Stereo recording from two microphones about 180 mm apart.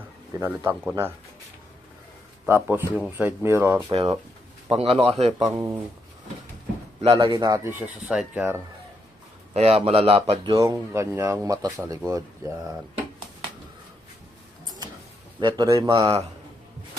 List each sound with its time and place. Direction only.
0.3 s speech: 15° right (ahead or behind)
2.5 s speech: 10° right (ahead or behind)
3.8 s speech: 30° right (ahead or behind)
5.5 s speech: 15° right (ahead or behind)
7.0 s speech: 30° right (ahead or behind); by 8.5 s 10° right (ahead or behind)
9.5 s speech: 35° right (ahead or behind)
10.6 s speech: 15° right (ahead or behind)
15.4 s speech: 25° right (ahead or behind)